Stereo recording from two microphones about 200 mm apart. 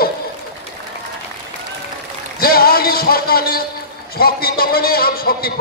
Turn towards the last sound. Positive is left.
turn(degrees=50)  # may be behind; listen again after turning